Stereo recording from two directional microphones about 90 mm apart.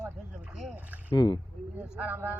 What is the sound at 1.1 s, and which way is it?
Speech, 55° left (ahead or behind).